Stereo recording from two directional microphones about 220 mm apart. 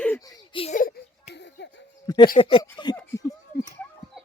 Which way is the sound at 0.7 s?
35° left (ahead or behind).